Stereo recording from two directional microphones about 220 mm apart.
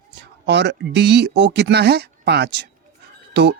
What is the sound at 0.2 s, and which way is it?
Speech, 50° right (ahead or behind).